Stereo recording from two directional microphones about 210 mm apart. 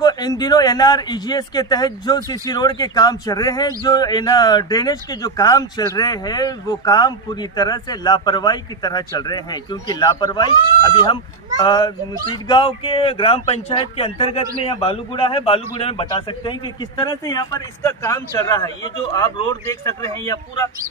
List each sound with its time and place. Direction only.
0.0 s a man's voice: 20° left (ahead or behind)